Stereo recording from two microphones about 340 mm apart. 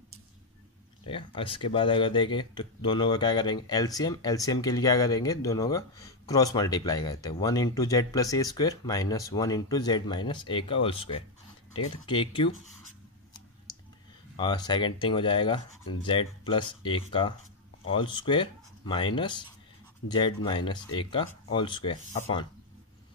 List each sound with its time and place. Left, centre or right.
1.0 s speech: centre
14.3 s speech: centre